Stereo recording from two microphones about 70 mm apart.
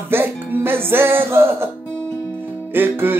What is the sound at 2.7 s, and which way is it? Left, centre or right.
Music, right.